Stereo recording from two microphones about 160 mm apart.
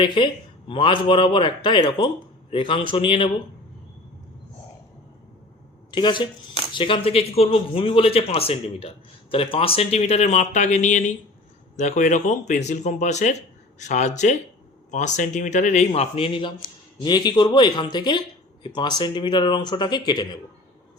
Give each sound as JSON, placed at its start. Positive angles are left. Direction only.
{"t": 0.0, "sound": "speech", "side_deg": 30}
{"t": 5.9, "sound": "speech", "side_deg": 30}